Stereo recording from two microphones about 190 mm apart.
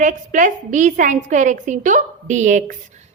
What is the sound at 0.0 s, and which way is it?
A woman's voice, 40° right (ahead or behind).